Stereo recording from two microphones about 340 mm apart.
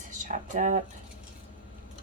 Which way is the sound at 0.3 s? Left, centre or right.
Right.